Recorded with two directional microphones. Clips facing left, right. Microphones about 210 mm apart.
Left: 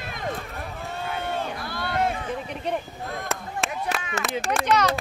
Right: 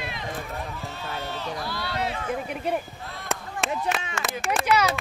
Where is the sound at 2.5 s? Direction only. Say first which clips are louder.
Right 1 dB; 5° right (ahead or behind).